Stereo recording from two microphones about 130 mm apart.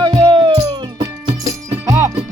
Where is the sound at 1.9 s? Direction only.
20° right (ahead or behind).